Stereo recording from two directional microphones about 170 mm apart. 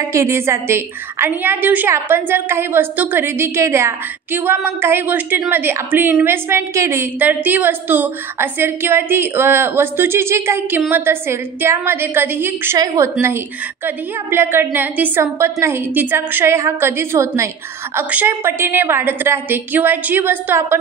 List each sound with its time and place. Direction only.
0.1 s a woman's voice: 15° right (ahead or behind)